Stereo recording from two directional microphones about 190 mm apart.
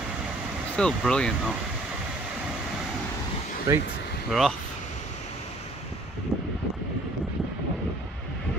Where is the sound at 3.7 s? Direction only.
15° right (ahead or behind).